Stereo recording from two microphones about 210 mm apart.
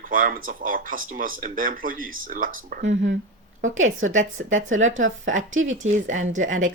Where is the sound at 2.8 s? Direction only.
60° right (ahead or behind).